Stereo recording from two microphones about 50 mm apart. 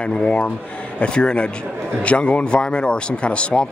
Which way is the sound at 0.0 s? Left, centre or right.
Centre.